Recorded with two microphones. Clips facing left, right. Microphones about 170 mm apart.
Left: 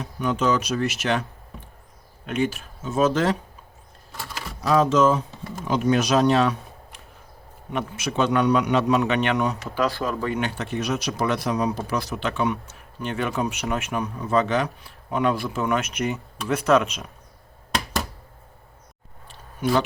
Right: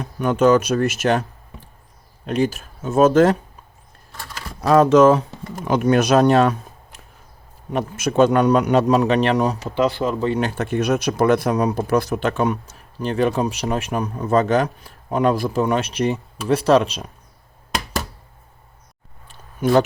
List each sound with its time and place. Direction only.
0.0 s speech: 50° right (ahead or behind)
2.2 s speech: 35° right (ahead or behind)
4.6 s a man's voice: 60° right (ahead or behind); by 9.7 s 35° right (ahead or behind)
9.7 s speech: 20° right (ahead or behind)
10.6 s a man's voice: 55° right (ahead or behind); by 17.1 s 30° right (ahead or behind)
19.3 s a sound: 50° right (ahead or behind)